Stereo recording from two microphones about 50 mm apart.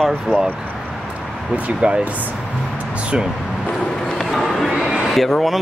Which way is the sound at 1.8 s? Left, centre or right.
Right.